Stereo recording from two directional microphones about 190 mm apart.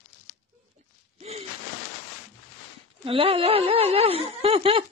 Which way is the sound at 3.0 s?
30° right (ahead or behind).